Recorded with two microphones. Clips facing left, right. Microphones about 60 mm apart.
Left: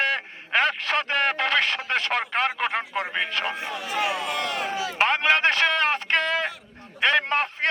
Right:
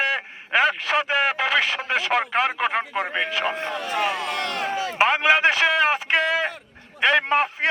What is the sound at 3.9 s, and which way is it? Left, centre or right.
Speech, centre.